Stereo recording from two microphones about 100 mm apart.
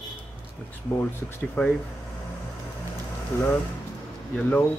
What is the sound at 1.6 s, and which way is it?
Speech, 15° left (ahead or behind).